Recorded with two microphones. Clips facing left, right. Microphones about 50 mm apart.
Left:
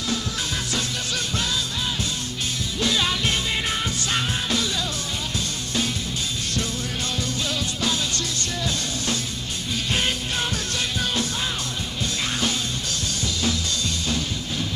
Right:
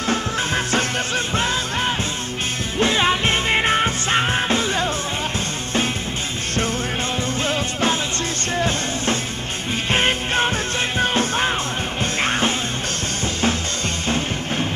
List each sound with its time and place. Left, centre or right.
0.7 s music: right
2.8 s music: right
7.4 s music: right
14.0 s music: right